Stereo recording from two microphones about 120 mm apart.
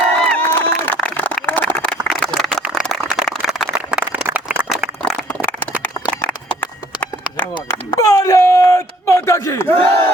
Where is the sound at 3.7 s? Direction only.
10° right (ahead or behind).